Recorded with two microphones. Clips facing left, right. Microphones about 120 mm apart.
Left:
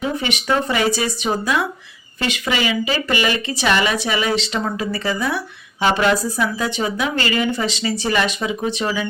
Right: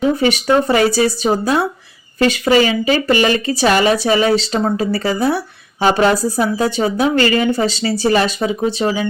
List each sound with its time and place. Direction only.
0.2 s speech: 35° right (ahead or behind)